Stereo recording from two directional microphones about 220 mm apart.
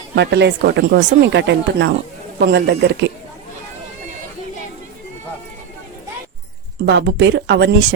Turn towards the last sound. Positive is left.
turn(degrees=-50)  # may be behind; listen again after turning